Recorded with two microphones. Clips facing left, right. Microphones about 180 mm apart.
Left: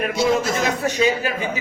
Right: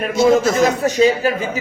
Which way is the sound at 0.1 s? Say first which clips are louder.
Right 9 dB; 45° right (ahead or behind).